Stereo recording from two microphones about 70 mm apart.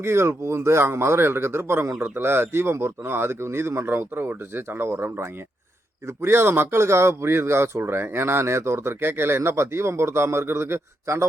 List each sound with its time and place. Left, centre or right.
0.0 s a man's voice: right